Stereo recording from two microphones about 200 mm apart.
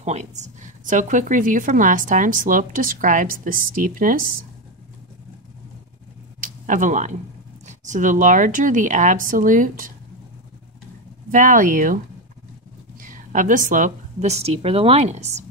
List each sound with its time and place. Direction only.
0.0 s a woman's voice: 35° right (ahead or behind)
6.4 s a woman's voice: 40° right (ahead or behind)
11.3 s a woman's voice: 40° right (ahead or behind)
13.0 s a woman's voice: 40° right (ahead or behind)